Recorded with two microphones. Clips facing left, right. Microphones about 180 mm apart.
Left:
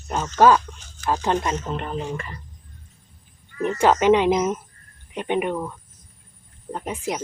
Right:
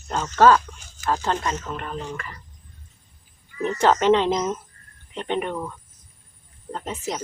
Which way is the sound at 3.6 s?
10° left (ahead or behind).